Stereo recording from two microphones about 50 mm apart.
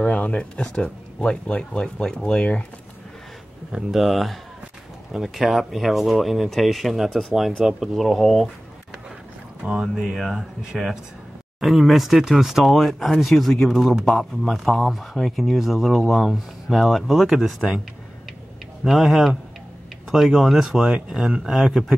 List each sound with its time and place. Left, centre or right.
0.0 s speech: left
3.9 s speech: centre
9.6 s speech: centre
10.0 s speech: centre
11.6 s speech: centre
18.9 s speech: centre